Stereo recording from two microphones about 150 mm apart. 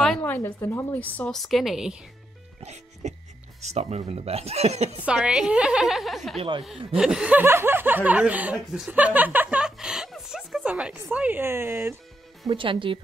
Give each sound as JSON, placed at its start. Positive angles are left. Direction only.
{"t": 0.2, "sound": "a woman's voice", "side_deg": 15}
{"t": 2.6, "sound": "music", "side_deg": -50}
{"t": 3.6, "sound": "speech", "side_deg": -45}
{"t": 5.0, "sound": "a woman's voice", "side_deg": -5}
{"t": 12.4, "sound": "speech", "side_deg": -35}